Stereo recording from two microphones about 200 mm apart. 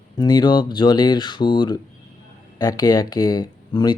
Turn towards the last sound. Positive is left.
turn(degrees=20)  # may be behind; listen again after turning